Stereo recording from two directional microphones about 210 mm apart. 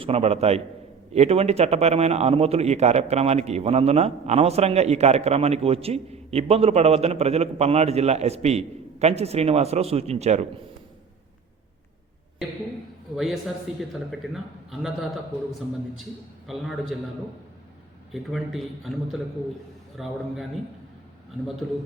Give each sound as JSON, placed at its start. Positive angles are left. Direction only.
{"t": 0.0, "sound": "a man's voice", "side_deg": -30}
{"t": 13.1, "sound": "a man's voice", "side_deg": 0}
{"t": 18.1, "sound": "a man's voice", "side_deg": 0}
{"t": 20.0, "sound": "a man's voice", "side_deg": 0}